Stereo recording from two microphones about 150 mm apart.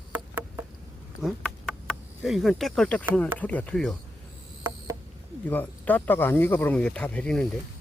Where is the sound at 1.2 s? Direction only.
5° left (ahead or behind).